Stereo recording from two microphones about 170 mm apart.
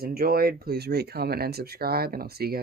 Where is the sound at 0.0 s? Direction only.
60° right (ahead or behind).